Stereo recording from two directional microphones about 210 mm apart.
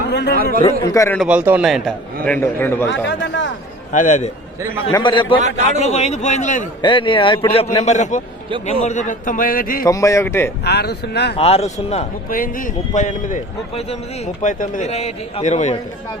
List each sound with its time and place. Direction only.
0.1 s chatter: 55° left (ahead or behind)
0.8 s speech: 15° left (ahead or behind)
1.2 s speech: 5° right (ahead or behind); by 2.8 s 10° left (ahead or behind)
2.9 s speech: 60° left (ahead or behind)
3.9 s a man's voice: 35° left (ahead or behind)
4.9 s a man's voice: 20° left (ahead or behind)
5.4 s a man's voice: 35° right (ahead or behind)
5.8 s a man's voice: 30° left (ahead or behind)
6.8 s a man's voice: 25° left (ahead or behind); by 9.8 s 45° left (ahead or behind)
9.8 s speech: 15° left (ahead or behind)
10.6 s speech: 50° left (ahead or behind)
11.3 s a man's voice: 30° left (ahead or behind)